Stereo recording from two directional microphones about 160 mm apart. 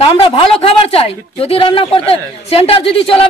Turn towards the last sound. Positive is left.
turn(degrees=35)  # may be behind; listen again after turning